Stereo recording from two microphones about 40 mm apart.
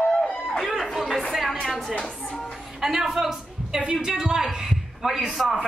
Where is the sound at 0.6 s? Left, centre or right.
Centre.